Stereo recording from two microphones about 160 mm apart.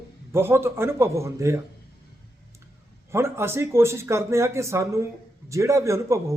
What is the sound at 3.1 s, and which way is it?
A man's voice, 15° right (ahead or behind).